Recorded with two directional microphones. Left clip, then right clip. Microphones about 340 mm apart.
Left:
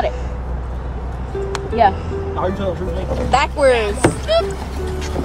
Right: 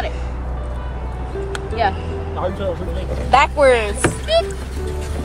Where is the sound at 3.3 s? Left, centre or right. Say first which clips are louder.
Right 2 dB; centre.